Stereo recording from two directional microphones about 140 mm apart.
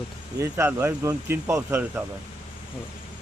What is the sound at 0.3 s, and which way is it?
Speech, 15° right (ahead or behind).